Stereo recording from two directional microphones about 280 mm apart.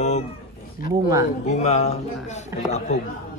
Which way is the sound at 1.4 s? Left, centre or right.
Left.